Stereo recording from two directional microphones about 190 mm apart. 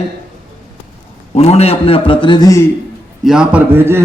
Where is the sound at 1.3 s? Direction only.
35° left (ahead or behind).